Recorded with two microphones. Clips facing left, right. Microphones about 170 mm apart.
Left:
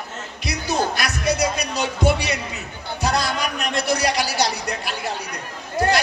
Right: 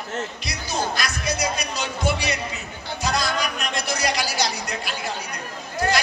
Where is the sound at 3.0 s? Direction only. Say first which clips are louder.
Left 3 dB; 65° left (ahead or behind).